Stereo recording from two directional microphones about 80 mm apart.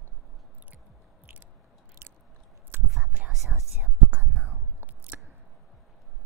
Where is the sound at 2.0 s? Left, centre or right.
Right.